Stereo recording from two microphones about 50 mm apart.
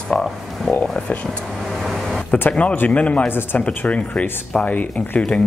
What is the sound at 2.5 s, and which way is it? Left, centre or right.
Speech, left.